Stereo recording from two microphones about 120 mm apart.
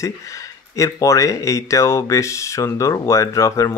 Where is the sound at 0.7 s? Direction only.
25° left (ahead or behind).